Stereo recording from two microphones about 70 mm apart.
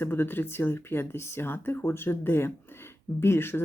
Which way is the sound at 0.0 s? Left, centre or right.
Left.